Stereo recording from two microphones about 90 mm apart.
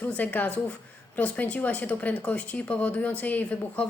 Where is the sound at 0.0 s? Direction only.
20° left (ahead or behind).